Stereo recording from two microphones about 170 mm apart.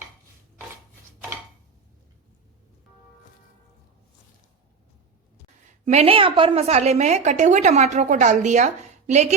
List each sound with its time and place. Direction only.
5.8 s a woman's voice: 40° right (ahead or behind)